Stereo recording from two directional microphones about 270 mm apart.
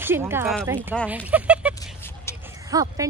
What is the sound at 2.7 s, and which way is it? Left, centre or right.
Speech, centre.